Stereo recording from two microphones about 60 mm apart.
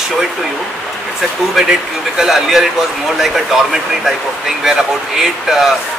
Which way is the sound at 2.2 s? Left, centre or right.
Centre.